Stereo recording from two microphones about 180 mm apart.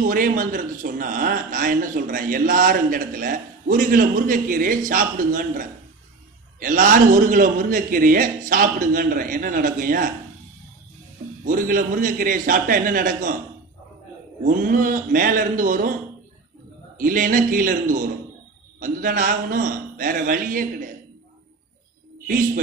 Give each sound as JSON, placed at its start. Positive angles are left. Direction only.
{"t": 0.0, "sound": "a man's voice", "side_deg": -50}
{"t": 11.4, "sound": "a man's voice", "side_deg": -50}
{"t": 14.4, "sound": "a man's voice", "side_deg": -45}
{"t": 17.0, "sound": "a man's voice", "side_deg": -50}